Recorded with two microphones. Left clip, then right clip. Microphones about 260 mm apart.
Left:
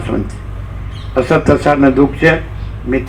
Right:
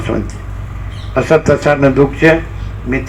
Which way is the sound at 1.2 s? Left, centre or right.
Right.